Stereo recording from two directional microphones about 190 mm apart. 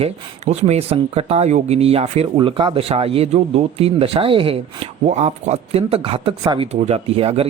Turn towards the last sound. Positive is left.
turn(degrees=-30)  # may be behind; listen again after turning